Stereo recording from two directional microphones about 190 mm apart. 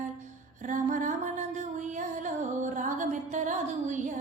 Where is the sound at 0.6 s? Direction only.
40° right (ahead or behind).